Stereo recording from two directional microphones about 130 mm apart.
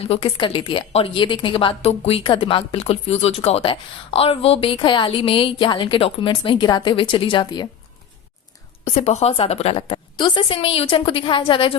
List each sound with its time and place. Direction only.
0.0 s a woman's voice: 45° left (ahead or behind)
8.8 s a woman's voice: 60° left (ahead or behind); by 11.8 s 40° left (ahead or behind)